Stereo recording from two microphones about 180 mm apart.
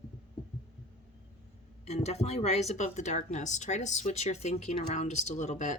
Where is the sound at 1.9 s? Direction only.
40° left (ahead or behind).